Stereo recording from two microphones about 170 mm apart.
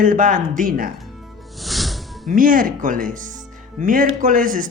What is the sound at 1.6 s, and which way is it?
Music, centre (ahead or behind).